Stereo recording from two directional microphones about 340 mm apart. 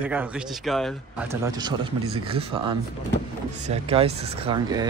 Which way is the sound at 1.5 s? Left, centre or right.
Centre.